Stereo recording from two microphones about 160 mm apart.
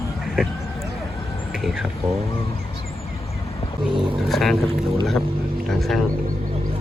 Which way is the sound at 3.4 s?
40° left (ahead or behind).